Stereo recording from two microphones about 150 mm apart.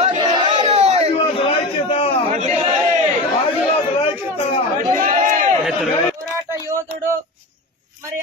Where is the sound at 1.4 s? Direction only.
40° left (ahead or behind).